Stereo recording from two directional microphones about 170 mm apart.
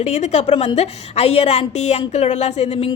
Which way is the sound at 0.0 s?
40° left (ahead or behind).